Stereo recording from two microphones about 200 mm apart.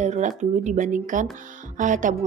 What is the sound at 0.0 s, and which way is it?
Speech, 35° right (ahead or behind).